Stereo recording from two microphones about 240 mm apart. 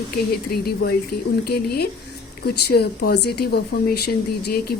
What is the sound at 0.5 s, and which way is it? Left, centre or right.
Speech, left.